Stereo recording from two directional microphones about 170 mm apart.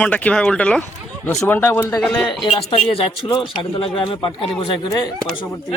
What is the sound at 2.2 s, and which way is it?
Speech, 30° left (ahead or behind).